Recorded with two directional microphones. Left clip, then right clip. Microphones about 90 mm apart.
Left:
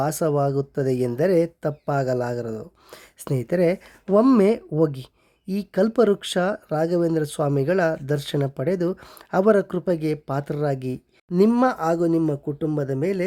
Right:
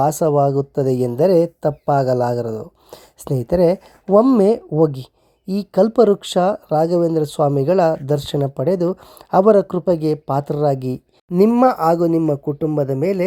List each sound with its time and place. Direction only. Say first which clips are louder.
0.0 s a man's voice: right 7 dB; 15° right (ahead or behind)
11.4 s speech: right 6 dB; 10° right (ahead or behind)
11.7 s a man's voice: right 6 dB; 25° right (ahead or behind)
12.2 s speech: right 5 dB; 5° right (ahead or behind)